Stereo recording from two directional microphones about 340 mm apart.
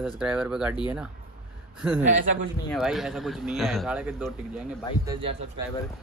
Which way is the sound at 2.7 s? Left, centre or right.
Centre.